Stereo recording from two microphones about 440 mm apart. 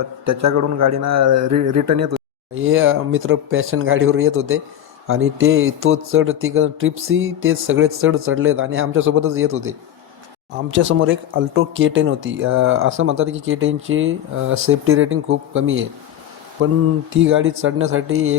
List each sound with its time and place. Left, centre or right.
0.3 s a man's voice: right
2.6 s speech: right